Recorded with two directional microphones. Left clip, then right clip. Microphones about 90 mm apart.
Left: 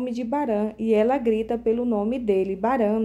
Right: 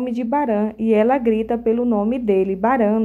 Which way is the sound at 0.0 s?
30° right (ahead or behind).